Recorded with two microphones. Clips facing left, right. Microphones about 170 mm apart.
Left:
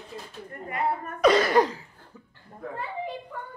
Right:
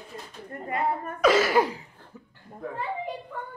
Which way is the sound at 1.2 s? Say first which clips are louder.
Left 1 dB; 5° right (ahead or behind).